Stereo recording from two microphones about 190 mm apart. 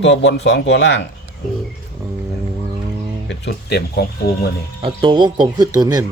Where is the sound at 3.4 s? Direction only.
60° left (ahead or behind).